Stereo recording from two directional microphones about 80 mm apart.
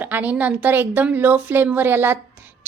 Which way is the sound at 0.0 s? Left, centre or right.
Right.